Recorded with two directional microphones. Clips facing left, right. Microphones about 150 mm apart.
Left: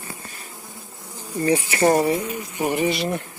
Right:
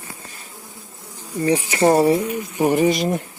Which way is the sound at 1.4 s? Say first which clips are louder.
Right 2 dB; 20° right (ahead or behind).